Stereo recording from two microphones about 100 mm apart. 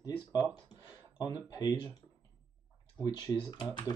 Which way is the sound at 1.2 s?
40° left (ahead or behind).